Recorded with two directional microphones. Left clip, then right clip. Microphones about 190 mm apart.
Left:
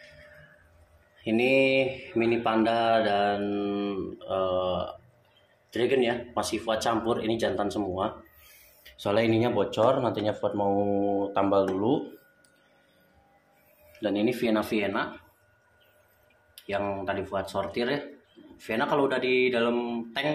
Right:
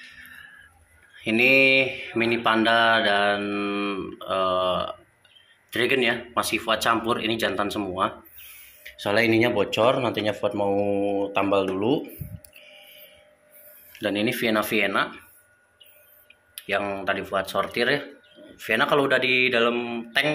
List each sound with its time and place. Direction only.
1.1 s mantra: centre (ahead or behind)
13.9 s mantra: centre (ahead or behind)
16.6 s mantra: centre (ahead or behind)